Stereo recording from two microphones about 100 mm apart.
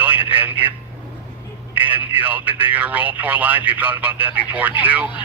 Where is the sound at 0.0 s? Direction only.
20° right (ahead or behind).